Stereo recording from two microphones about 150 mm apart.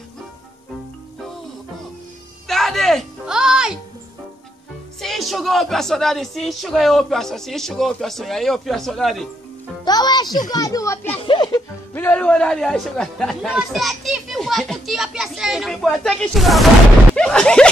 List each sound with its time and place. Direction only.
2.4 s music: centre (ahead or behind)
5.0 s a woman's voice: centre (ahead or behind)
9.8 s music: 30° left (ahead or behind)
10.5 s a child's voice: 25° left (ahead or behind)
11.2 s music: 30° left (ahead or behind)
11.9 s speech: 10° left (ahead or behind)
17.1 s a sound: 5° left (ahead or behind)